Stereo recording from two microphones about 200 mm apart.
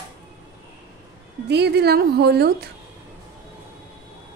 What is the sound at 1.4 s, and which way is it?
A woman's voice, 55° right (ahead or behind).